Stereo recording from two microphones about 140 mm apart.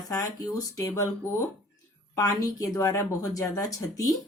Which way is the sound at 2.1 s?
25° left (ahead or behind).